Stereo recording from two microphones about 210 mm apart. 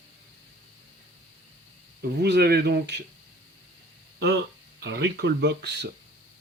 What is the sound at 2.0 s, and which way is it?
Speech, 50° right (ahead or behind).